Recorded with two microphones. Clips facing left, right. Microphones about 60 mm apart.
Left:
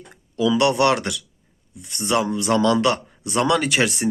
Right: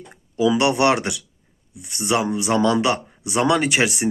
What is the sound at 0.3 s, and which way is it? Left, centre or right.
Speech, centre.